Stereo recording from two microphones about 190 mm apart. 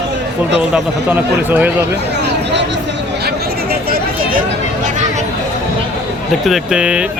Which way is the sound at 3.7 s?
50° right (ahead or behind).